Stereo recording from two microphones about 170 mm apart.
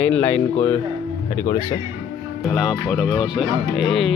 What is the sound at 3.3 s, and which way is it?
Speech, centre (ahead or behind).